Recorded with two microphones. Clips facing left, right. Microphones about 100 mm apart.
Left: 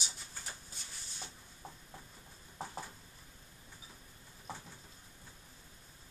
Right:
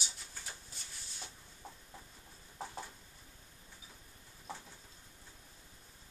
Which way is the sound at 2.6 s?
5° left (ahead or behind).